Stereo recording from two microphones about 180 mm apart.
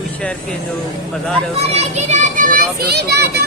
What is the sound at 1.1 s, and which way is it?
Speech, 5° left (ahead or behind).